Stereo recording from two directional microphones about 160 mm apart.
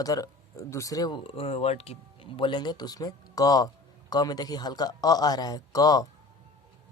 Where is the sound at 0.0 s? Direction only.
20° left (ahead or behind).